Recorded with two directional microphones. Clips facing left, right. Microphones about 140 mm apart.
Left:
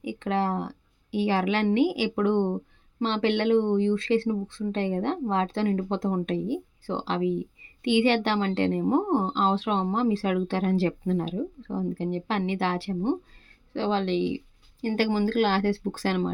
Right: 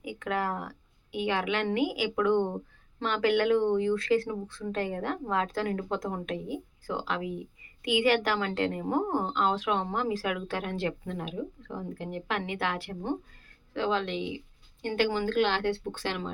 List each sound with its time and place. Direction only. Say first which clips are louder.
0.0 s a woman's voice: left 4 dB; 25° left (ahead or behind)